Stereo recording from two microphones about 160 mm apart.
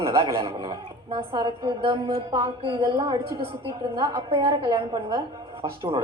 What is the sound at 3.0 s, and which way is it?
Speech, 20° right (ahead or behind).